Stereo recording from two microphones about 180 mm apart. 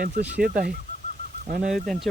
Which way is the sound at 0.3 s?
55° right (ahead or behind).